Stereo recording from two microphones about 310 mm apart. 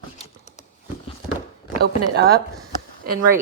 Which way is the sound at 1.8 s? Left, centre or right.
Right.